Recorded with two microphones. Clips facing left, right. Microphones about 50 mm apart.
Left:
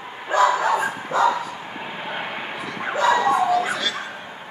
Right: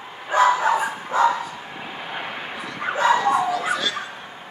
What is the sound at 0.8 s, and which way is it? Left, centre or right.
Dog, left.